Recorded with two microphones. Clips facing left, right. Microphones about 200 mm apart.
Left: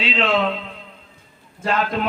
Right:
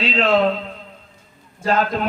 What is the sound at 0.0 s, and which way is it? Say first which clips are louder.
A man's voice: right 3 dB; 40° right (ahead or behind).